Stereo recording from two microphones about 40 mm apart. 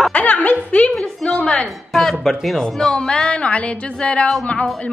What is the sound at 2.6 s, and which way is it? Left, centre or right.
A woman's voice, left.